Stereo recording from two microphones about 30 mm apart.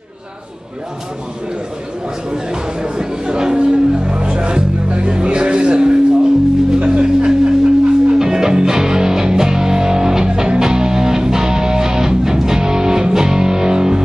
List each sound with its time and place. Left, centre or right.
2.3 s speech: right
6.8 s music: right